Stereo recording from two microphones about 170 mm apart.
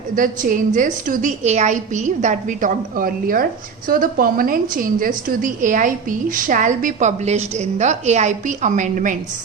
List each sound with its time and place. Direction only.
0.2 s a woman's voice: 50° right (ahead or behind)